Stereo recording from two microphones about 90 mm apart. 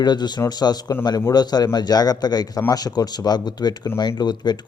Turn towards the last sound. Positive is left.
turn(degrees=50)  # may be behind; listen again after turning